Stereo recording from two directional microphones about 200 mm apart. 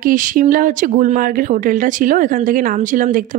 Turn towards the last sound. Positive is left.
turn(degrees=-40)  # may be behind; listen again after turning